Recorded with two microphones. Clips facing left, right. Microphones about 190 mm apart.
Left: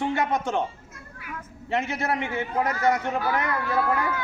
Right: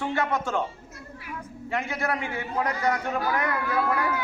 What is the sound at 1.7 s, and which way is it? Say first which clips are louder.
A man's voice: left 2 dB; 25° left (ahead or behind).